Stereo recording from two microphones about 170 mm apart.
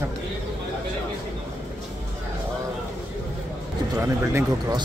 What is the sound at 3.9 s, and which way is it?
Speech, 15° right (ahead or behind).